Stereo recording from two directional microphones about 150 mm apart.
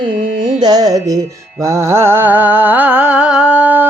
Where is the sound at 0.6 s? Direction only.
25° right (ahead or behind).